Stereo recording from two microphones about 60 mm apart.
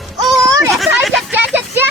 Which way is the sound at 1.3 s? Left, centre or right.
Right.